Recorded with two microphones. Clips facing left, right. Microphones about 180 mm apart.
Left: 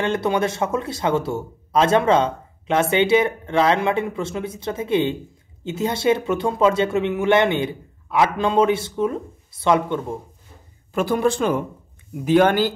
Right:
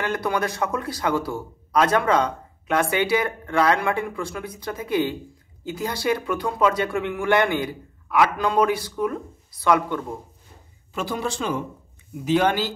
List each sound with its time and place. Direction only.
0.0 s a man's voice: 25° left (ahead or behind)
10.9 s speech: 50° left (ahead or behind)